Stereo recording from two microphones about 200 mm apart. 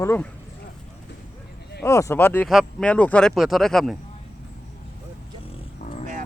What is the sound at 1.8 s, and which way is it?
Speech, 15° left (ahead or behind).